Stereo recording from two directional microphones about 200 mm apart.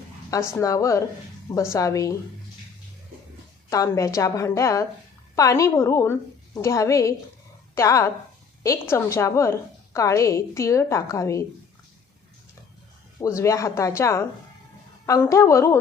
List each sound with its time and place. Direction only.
0.3 s a woman's voice: 15° left (ahead or behind)
3.7 s a woman's voice: 15° left (ahead or behind)
13.1 s a woman's voice: 15° left (ahead or behind)